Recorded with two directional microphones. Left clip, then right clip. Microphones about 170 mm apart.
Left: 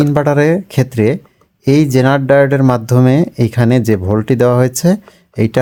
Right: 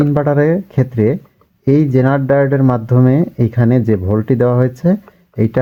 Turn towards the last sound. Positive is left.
turn(degrees=20)  # may be behind; listen again after turning